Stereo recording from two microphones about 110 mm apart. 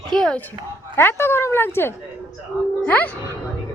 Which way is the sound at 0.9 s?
20° left (ahead or behind).